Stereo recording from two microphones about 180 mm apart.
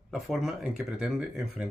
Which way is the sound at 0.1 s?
Centre (ahead or behind).